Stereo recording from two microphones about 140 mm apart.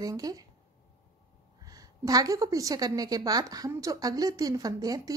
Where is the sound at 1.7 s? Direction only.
25° right (ahead or behind).